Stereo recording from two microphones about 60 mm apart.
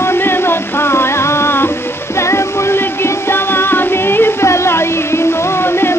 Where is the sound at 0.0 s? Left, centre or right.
Left.